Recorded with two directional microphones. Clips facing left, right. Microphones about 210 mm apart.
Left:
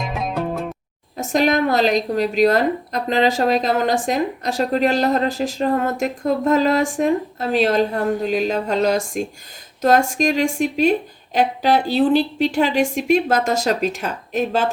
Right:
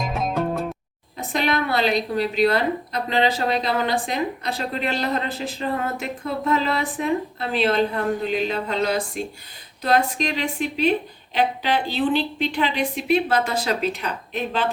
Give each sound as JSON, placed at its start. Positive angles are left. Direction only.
{"t": 0.0, "sound": "music", "side_deg": 0}
{"t": 1.1, "sound": "speech", "side_deg": 45}